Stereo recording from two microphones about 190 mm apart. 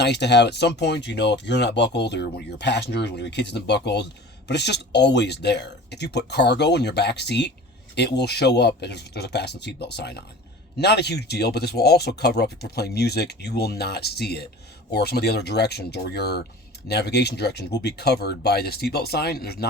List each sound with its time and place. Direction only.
0.0 s speech: 60° left (ahead or behind)